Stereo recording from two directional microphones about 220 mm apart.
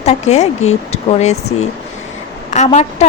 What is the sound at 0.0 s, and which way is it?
A woman's voice, 30° left (ahead or behind).